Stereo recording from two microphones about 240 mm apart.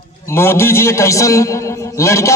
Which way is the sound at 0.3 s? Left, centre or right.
Centre.